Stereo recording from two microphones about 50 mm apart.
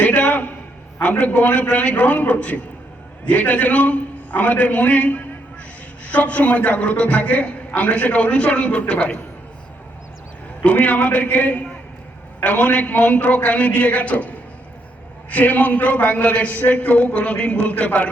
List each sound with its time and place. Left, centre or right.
0.0 s a sound: left
1.0 s a man's voice: left
10.6 s a man's voice: left
15.3 s a man's voice: left